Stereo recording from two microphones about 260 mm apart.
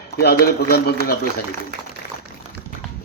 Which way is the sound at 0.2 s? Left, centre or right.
Left.